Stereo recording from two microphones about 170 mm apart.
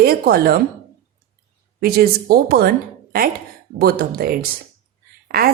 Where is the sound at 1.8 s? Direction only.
65° right (ahead or behind).